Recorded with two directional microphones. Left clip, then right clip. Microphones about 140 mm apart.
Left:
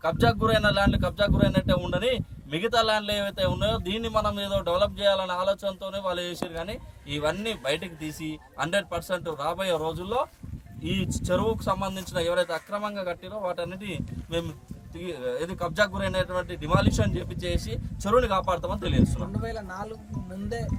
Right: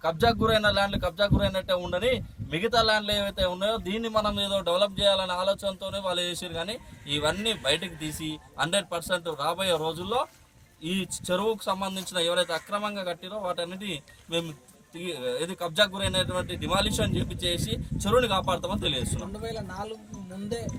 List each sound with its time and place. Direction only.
0.0 s speech: centre (ahead or behind)
19.5 s speech: 35° right (ahead or behind)